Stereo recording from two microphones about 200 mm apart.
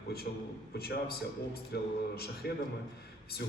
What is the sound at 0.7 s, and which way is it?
A man's voice, 50° left (ahead or behind).